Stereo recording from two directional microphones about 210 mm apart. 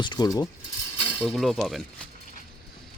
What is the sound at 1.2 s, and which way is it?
Speech, centre (ahead or behind).